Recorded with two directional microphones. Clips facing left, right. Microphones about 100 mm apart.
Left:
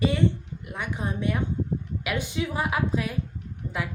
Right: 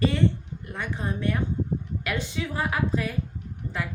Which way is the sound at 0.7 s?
15° left (ahead or behind).